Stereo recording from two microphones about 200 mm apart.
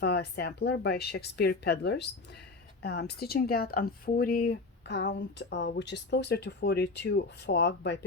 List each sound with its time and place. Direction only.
0.0 s a woman's voice: 55° left (ahead or behind)